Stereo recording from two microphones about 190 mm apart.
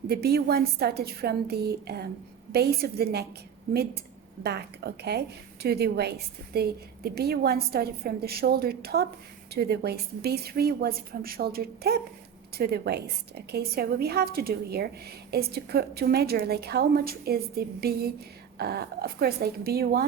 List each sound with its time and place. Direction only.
0.1 s a woman's voice: 55° right (ahead or behind)
4.4 s a woman's voice: 60° right (ahead or behind)